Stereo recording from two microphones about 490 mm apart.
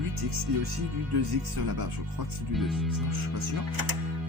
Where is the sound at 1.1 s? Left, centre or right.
Right.